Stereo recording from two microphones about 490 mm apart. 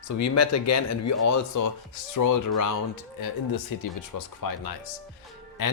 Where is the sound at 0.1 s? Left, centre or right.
Left.